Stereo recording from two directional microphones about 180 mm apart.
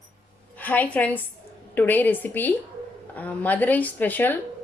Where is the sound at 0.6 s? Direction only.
10° left (ahead or behind).